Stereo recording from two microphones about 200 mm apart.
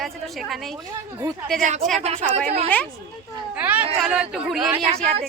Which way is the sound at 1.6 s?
35° right (ahead or behind).